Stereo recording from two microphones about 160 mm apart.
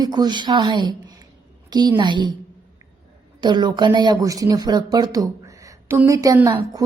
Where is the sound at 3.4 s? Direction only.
25° right (ahead or behind).